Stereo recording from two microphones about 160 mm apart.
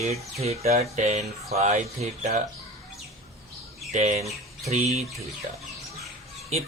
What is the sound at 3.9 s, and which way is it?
Speech, 45° right (ahead or behind).